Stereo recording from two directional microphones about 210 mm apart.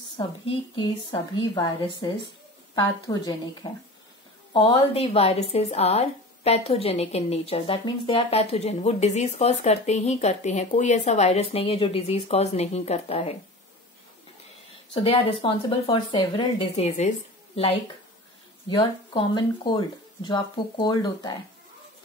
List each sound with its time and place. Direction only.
0.5 s a woman's voice: 20° left (ahead or behind)
15.0 s a woman's voice: 25° left (ahead or behind)
18.7 s a woman's voice: 25° left (ahead or behind)